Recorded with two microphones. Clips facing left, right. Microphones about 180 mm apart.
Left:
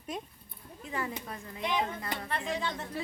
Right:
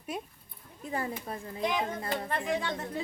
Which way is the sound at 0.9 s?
35° right (ahead or behind).